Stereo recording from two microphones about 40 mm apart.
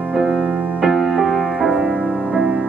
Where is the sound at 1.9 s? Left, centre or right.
Right.